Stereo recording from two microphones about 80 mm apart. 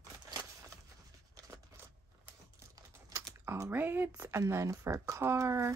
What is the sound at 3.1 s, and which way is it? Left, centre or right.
Typing, right.